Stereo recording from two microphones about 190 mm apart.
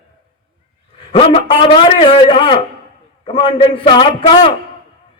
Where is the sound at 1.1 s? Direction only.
30° left (ahead or behind).